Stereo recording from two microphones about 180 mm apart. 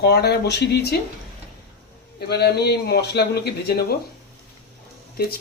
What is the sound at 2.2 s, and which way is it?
Speech, 65° left (ahead or behind).